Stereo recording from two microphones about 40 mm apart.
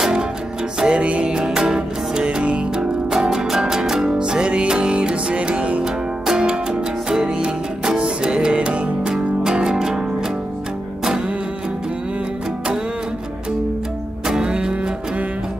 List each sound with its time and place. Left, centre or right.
0.7 s music: right
2.2 s music: right
4.1 s music: right
5.9 s music: centre
9.1 s music: centre
11.1 s music: centre
14.2 s music: centre
14.5 s music: right